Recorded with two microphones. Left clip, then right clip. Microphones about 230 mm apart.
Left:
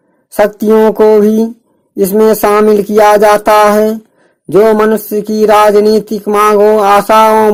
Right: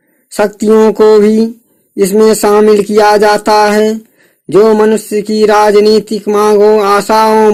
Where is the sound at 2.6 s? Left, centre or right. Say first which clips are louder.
Right 1 dB; left.